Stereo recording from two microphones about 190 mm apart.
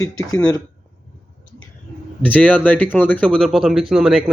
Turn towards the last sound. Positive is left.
turn(degrees=0)  # may be behind; listen again after turning